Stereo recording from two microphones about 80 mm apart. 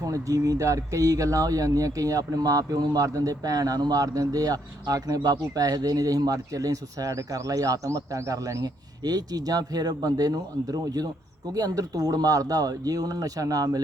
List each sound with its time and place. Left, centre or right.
0.0 s speech: right